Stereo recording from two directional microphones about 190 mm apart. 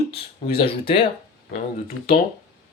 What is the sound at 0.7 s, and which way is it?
Speech, 25° left (ahead or behind).